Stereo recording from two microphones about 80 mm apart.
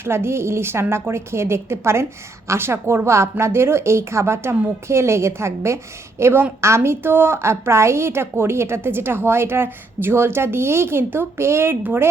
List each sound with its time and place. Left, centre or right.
0.0 s a woman's voice: right
11.8 s a woman's voice: right